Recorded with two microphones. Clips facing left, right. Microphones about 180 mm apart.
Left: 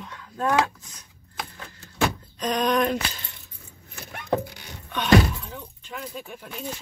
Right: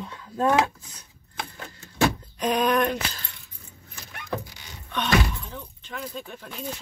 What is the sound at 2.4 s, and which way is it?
Speech, 10° right (ahead or behind).